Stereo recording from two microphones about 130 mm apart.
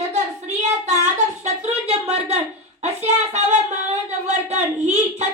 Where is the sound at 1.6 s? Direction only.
50° right (ahead or behind).